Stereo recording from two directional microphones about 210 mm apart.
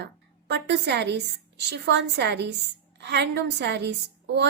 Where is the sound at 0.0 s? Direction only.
55° right (ahead or behind).